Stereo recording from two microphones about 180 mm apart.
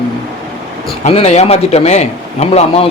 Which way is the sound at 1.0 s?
35° left (ahead or behind).